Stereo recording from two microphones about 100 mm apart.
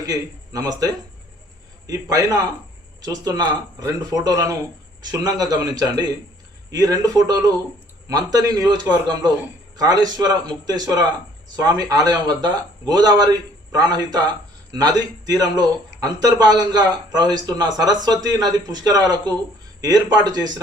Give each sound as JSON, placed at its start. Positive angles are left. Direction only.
{"t": 0.0, "sound": "a man's voice", "side_deg": -40}
{"t": 1.9, "sound": "a man's voice", "side_deg": -40}